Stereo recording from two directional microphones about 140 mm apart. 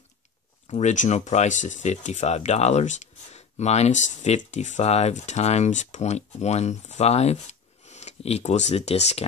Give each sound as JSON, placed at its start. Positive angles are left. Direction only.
{"t": 0.7, "sound": "speech", "side_deg": 55}